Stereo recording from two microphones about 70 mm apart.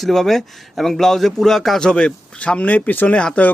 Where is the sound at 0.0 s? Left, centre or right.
Centre.